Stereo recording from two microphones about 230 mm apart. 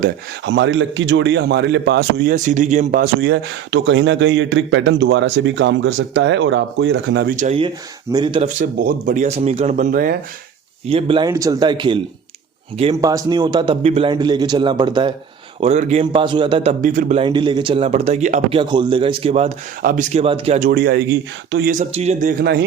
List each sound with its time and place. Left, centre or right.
0.0 s a man's voice: right
7.3 s speech: right
8.8 s speech: right
10.8 s speech: right
15.6 s speech: right
16.8 s speech: right